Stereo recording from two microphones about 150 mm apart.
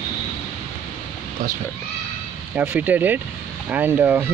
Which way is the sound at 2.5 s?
10° right (ahead or behind).